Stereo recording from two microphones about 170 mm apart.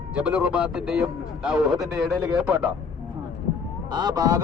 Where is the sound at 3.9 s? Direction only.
25° right (ahead or behind).